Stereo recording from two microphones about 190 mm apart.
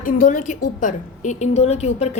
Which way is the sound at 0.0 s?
45° left (ahead or behind).